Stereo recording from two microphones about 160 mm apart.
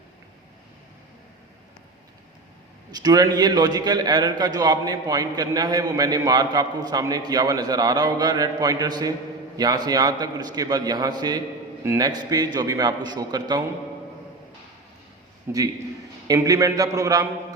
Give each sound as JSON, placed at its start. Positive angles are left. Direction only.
{"t": 2.9, "sound": "a man's voice", "side_deg": -25}
{"t": 15.5, "sound": "a man's voice", "side_deg": -15}